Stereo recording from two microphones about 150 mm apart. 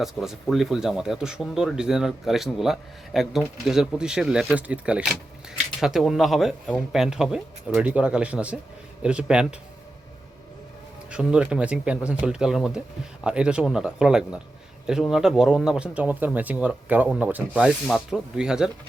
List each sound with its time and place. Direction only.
0.0 s speech: centre (ahead or behind)
11.1 s speech: 5° right (ahead or behind)